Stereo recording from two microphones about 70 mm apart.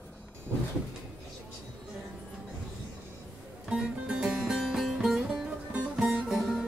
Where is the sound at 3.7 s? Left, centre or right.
Centre.